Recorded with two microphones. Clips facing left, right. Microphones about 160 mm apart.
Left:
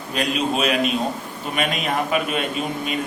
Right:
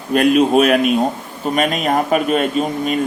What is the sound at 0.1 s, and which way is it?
A man's voice, 50° right (ahead or behind).